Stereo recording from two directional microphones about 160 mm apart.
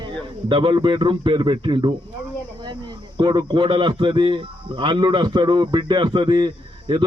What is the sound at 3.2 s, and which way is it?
Speech, 30° right (ahead or behind).